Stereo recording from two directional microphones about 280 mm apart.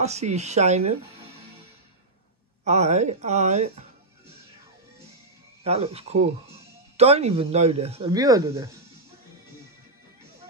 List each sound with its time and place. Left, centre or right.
0.0 s speech: right
2.6 s speech: right
5.6 s speech: right